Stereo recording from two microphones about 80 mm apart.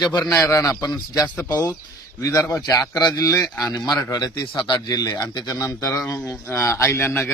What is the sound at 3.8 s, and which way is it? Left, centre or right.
Speech, left.